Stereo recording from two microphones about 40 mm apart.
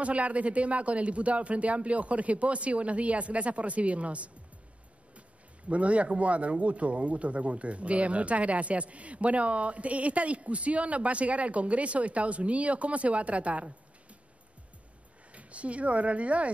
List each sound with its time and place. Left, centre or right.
0.0 s speech: right
5.7 s speech: right
15.3 s speech: right